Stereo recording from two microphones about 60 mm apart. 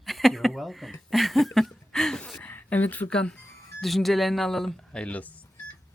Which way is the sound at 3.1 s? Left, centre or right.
Centre.